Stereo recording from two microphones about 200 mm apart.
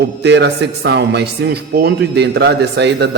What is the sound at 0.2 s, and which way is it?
Speech, 60° right (ahead or behind).